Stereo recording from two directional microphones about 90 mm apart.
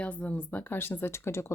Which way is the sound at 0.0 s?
15° left (ahead or behind).